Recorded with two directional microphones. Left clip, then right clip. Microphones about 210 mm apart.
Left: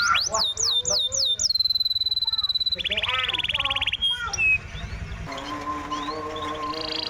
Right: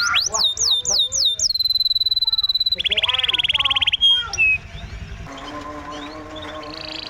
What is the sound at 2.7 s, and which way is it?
Frog, 25° right (ahead or behind).